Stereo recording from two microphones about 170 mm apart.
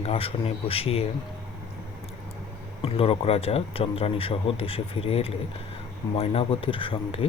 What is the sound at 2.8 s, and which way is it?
Speech, 35° left (ahead or behind).